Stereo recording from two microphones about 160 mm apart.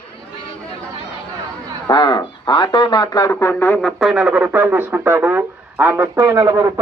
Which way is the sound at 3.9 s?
Centre (ahead or behind).